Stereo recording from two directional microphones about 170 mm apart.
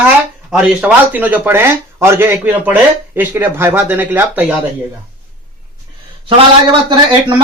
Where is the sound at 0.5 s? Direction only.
5° right (ahead or behind).